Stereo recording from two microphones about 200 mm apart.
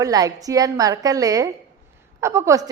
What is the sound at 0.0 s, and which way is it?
A woman's voice, 15° right (ahead or behind).